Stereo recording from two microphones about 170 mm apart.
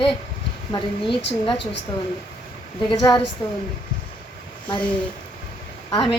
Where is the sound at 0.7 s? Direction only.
30° left (ahead or behind).